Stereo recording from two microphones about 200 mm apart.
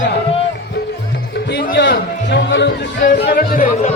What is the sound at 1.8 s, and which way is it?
A man's voice, 60° left (ahead or behind).